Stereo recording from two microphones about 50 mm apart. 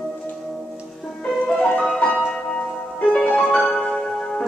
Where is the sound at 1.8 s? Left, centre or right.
Centre.